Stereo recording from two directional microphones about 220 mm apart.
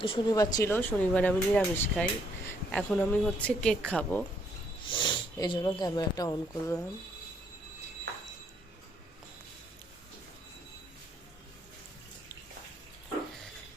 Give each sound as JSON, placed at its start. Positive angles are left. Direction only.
{"t": 0.0, "sound": "a woman's voice", "side_deg": 20}
{"t": 4.9, "sound": "speech", "side_deg": 20}